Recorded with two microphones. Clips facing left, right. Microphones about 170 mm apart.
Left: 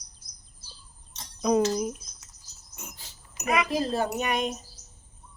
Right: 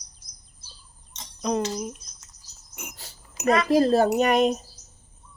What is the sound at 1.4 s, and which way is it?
Speech, 5° left (ahead or behind).